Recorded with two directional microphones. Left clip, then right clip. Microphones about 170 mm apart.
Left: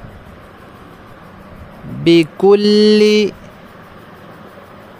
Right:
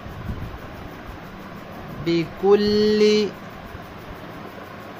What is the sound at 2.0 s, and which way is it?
Speech, 60° left (ahead or behind).